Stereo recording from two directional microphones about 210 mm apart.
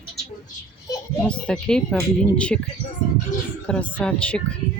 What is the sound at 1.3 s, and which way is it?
Speech, 5° left (ahead or behind).